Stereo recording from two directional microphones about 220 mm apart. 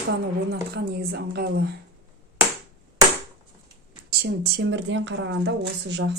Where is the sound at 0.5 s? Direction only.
45° right (ahead or behind).